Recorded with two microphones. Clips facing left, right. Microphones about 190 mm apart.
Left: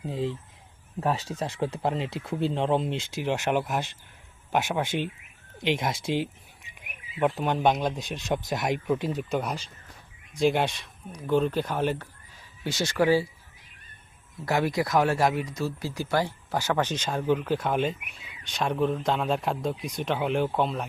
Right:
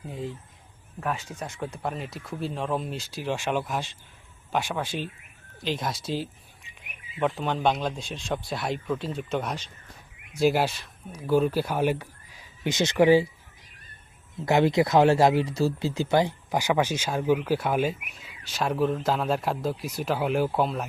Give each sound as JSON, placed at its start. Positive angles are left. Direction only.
{"t": 0.9, "sound": "speech", "side_deg": 30}
{"t": 7.2, "sound": "speech", "side_deg": 15}
{"t": 10.3, "sound": "speech", "side_deg": -5}
{"t": 14.3, "sound": "speech", "side_deg": -20}